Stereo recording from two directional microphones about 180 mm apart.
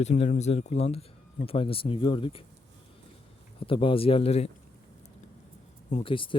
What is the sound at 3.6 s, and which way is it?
Speech, 30° left (ahead or behind).